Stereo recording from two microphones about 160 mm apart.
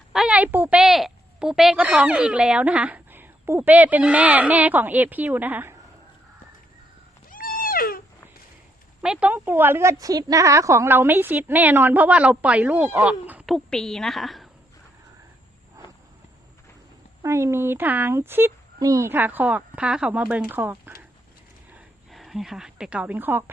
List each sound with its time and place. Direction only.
0.1 s a woman's voice: 5° right (ahead or behind)
7.3 s cat: 60° left (ahead or behind)
9.0 s a woman's voice: 5° right (ahead or behind)
13.5 s a woman's voice: 5° left (ahead or behind)
17.2 s a woman's voice: 15° right (ahead or behind)
22.1 s a woman's voice: centre (ahead or behind)